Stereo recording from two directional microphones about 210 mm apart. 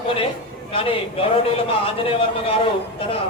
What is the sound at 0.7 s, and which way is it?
A man's voice, 25° left (ahead or behind).